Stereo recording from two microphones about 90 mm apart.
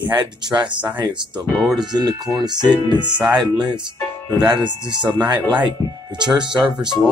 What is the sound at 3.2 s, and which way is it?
Speech, 10° right (ahead or behind).